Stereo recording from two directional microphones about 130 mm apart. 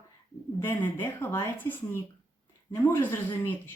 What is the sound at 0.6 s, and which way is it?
Speech, 15° left (ahead or behind).